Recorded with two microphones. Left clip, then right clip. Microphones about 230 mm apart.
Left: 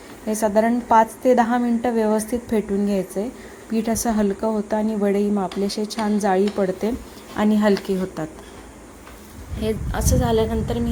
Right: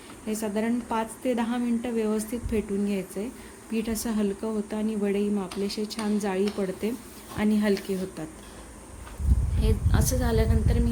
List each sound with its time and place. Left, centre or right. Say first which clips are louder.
0.3 s a woman's voice: left 11 dB; centre
9.6 s a woman's voice: left 6 dB; centre